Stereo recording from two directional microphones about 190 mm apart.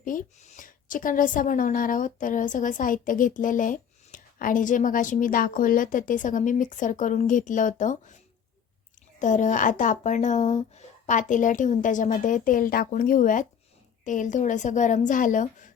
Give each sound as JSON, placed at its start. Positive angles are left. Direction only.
{"t": 0.0, "sound": "a woman's voice", "side_deg": 45}
{"t": 9.1, "sound": "a woman's voice", "side_deg": 40}